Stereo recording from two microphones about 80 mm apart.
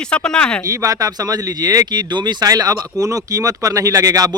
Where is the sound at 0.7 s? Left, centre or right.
Right.